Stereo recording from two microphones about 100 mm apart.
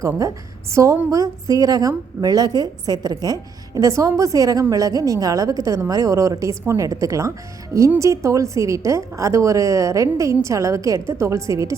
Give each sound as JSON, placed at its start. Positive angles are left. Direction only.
{"t": 0.0, "sound": "a woman's voice", "side_deg": -35}